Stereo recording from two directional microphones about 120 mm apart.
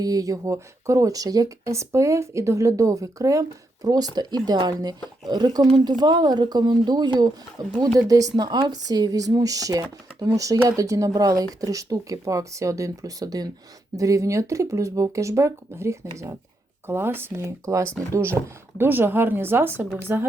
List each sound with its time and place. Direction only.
0.0 s speech: 30° right (ahead or behind)